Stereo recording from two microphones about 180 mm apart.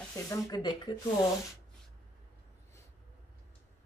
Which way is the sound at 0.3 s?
25° left (ahead or behind).